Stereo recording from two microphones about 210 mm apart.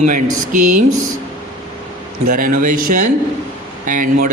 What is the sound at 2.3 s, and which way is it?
A man's voice, 40° right (ahead or behind).